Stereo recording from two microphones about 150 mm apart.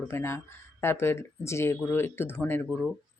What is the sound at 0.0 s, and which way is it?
Speech, 15° left (ahead or behind).